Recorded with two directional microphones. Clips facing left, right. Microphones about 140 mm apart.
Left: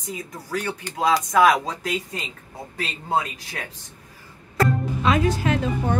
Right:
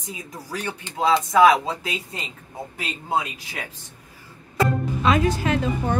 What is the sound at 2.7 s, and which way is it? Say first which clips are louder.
Speech: left 1 dB; 10° right (ahead or behind).